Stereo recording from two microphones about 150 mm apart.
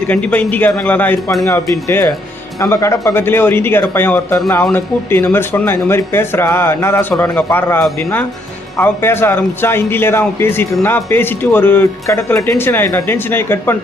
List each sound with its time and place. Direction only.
0.1 s a man's voice: 10° left (ahead or behind)